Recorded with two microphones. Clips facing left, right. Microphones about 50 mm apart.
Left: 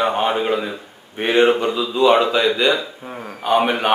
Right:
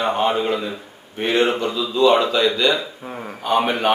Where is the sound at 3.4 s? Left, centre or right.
Centre.